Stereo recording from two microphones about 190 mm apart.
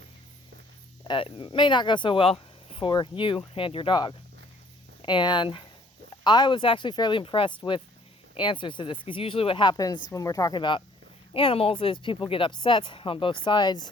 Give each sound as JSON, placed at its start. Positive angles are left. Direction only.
{"t": 1.0, "sound": "speech", "side_deg": 25}